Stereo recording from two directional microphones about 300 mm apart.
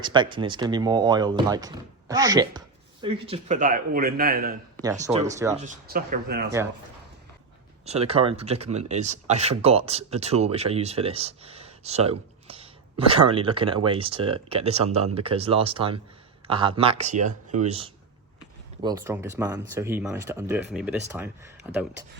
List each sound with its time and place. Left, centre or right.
0.0 s speech: centre
5.0 s speech: centre
5.5 s speech: right
7.9 s speech: centre